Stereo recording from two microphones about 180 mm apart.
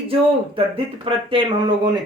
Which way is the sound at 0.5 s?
30° right (ahead or behind).